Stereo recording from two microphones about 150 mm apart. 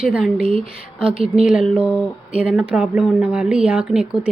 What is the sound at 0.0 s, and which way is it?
Speech, 5° right (ahead or behind).